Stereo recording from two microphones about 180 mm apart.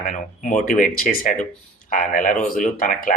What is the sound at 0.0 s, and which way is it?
Speech, 45° left (ahead or behind).